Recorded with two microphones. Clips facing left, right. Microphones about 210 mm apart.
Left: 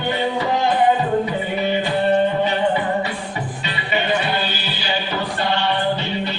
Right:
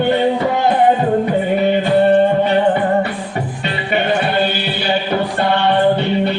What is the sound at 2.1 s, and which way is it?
Music, 55° right (ahead or behind).